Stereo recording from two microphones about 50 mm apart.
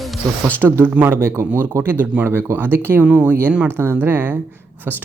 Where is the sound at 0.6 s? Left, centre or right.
Right.